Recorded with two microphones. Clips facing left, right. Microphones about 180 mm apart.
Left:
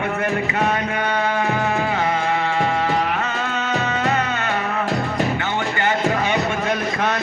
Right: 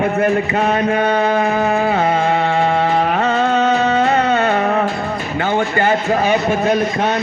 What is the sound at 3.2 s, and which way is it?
Music, 35° right (ahead or behind).